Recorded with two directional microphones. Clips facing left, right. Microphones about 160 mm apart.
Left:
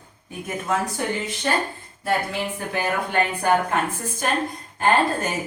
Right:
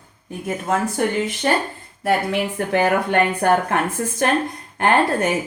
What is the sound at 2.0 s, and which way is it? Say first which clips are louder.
A woman's voice: right 4 dB; 70° right (ahead or behind).